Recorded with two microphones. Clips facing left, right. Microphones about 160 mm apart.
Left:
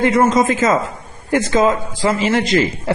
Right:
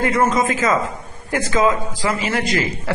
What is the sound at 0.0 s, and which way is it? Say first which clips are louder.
A woman's voice: left 4 dB; 25° left (ahead or behind).